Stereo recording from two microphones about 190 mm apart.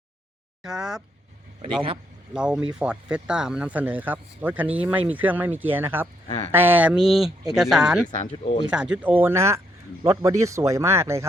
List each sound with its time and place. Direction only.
0.6 s speech: 5° right (ahead or behind)
2.3 s speech: 5° right (ahead or behind)
8.2 s speech: 40° left (ahead or behind)
8.7 s speech: 5° right (ahead or behind)